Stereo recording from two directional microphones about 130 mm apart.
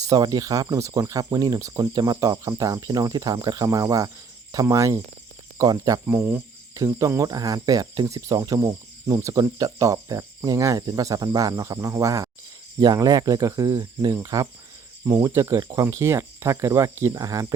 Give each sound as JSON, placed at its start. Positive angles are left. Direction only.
{"t": 0.1, "sound": "speech", "side_deg": -30}
{"t": 6.1, "sound": "speech", "side_deg": -15}